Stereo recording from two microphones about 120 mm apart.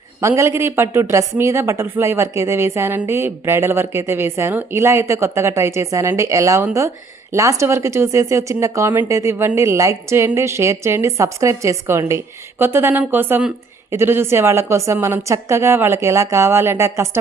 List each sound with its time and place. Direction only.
0.2 s speech: 25° right (ahead or behind)